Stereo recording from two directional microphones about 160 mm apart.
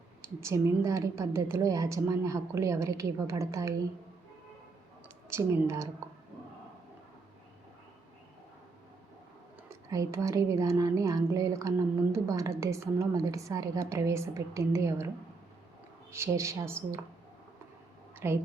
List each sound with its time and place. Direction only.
0.3 s a woman's voice: 20° right (ahead or behind)
5.0 s a woman's voice: 15° right (ahead or behind)
9.9 s a woman's voice: 20° right (ahead or behind)
16.1 s speech: 15° right (ahead or behind)
18.2 s speech: 15° right (ahead or behind)